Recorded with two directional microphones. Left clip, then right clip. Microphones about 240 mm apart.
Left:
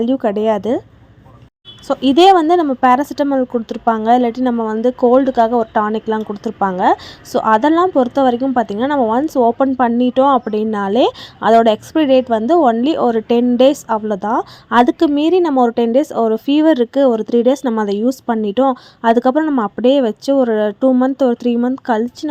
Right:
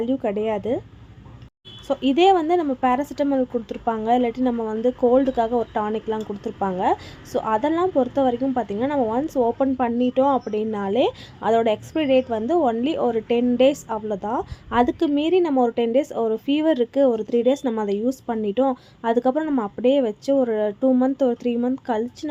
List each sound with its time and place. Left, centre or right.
0.0 s speech: left
1.9 s speech: left